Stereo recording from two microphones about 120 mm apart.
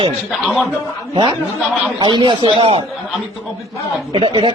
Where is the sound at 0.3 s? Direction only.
5° right (ahead or behind).